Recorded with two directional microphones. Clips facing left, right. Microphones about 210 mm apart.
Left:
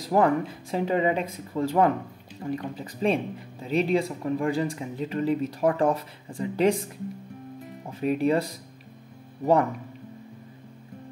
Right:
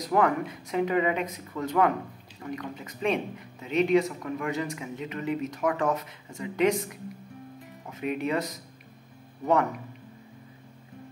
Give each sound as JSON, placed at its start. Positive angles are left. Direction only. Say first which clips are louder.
{"t": 0.0, "sound": "speech", "louder": "left 3 dB", "side_deg": 30}